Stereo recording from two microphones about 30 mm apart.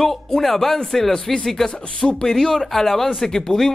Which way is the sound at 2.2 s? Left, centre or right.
Centre.